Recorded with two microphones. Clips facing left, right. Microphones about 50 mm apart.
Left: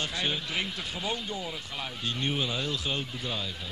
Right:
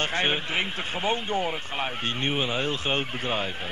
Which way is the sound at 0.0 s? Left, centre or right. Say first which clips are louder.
Right 6 dB; right.